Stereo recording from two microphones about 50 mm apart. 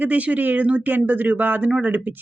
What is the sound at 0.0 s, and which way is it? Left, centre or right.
Speech, right.